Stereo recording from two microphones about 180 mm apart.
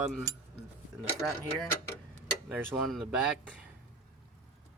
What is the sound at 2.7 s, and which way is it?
Speech, centre (ahead or behind).